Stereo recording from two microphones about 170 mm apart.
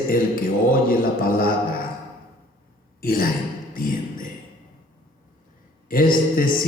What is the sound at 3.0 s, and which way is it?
Speech, 55° left (ahead or behind).